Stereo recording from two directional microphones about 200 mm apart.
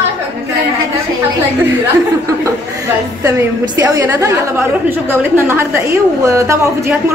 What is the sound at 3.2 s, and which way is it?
A woman's voice, 15° right (ahead or behind).